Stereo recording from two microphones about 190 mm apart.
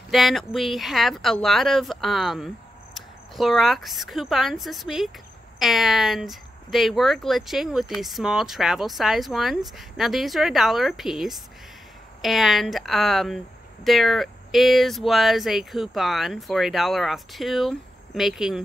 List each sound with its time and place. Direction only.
0.1 s speech: centre (ahead or behind)